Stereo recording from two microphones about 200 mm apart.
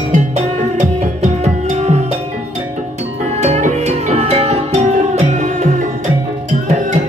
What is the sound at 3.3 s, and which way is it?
Music, 35° right (ahead or behind).